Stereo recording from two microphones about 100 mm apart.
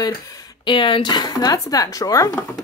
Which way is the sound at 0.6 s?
55° left (ahead or behind).